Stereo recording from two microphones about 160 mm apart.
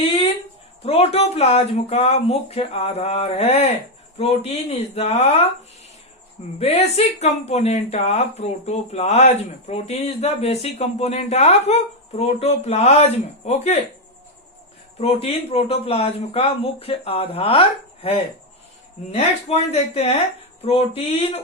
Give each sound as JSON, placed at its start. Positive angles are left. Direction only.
{"t": 0.9, "sound": "speech", "side_deg": 40}
{"t": 6.6, "sound": "speech", "side_deg": 40}
{"t": 15.0, "sound": "speech", "side_deg": 40}